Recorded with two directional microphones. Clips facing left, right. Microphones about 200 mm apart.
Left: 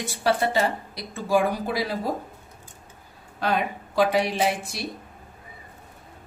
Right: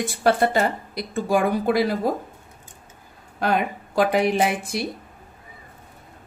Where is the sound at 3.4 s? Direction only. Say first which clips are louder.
Right 3 dB; 50° right (ahead or behind).